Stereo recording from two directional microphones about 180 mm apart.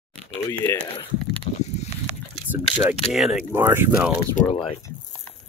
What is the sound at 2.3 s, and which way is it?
Speech, 10° right (ahead or behind).